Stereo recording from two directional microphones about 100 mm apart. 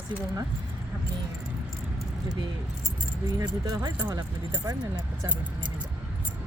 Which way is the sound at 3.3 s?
35° right (ahead or behind).